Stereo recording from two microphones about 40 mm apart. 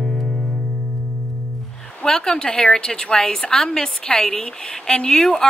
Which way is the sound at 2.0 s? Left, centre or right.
Centre.